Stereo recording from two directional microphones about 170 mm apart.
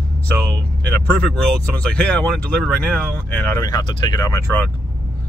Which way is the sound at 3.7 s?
25° left (ahead or behind).